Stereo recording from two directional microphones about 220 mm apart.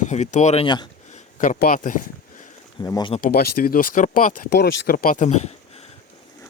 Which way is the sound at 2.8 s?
20° left (ahead or behind).